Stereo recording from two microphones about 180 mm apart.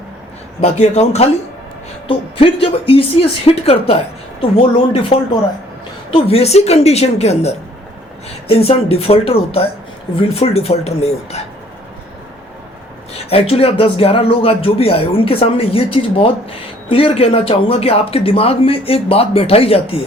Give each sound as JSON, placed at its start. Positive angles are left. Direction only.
{"t": 0.6, "sound": "speech", "side_deg": 35}
{"t": 13.1, "sound": "speech", "side_deg": 30}